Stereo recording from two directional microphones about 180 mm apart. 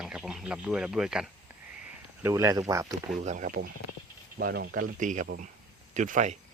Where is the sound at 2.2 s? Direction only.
15° right (ahead or behind).